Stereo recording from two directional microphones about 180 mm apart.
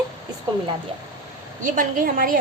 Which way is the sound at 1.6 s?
50° right (ahead or behind).